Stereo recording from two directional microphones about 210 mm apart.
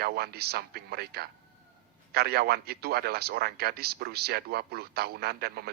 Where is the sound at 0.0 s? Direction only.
50° right (ahead or behind).